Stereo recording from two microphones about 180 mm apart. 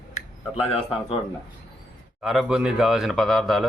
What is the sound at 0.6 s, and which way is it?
Speech, 30° left (ahead or behind).